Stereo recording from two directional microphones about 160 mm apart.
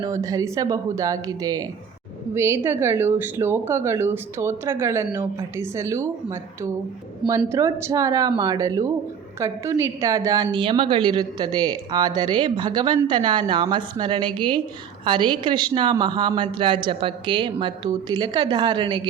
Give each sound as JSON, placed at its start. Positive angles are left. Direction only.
{"t": 0.0, "sound": "a woman's voice", "side_deg": -20}